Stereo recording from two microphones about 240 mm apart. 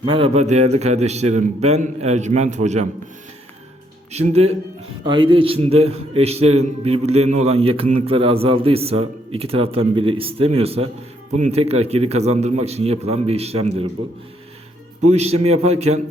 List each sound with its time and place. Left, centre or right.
0.1 s a man's voice: right
4.1 s a man's voice: right
15.0 s a man's voice: right